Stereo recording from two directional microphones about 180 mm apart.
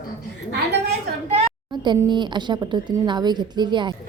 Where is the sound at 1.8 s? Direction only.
25° right (ahead or behind).